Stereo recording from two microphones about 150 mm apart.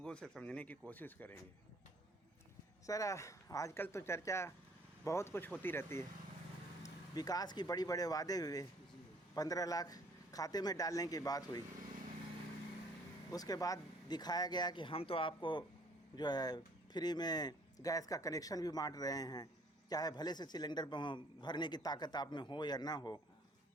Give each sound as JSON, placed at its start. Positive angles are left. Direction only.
{"t": 0.0, "sound": "speech", "side_deg": 5}
{"t": 2.8, "sound": "speech", "side_deg": 20}
{"t": 13.3, "sound": "speech", "side_deg": 25}